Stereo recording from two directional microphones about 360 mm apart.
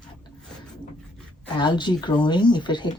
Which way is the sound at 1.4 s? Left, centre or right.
Centre.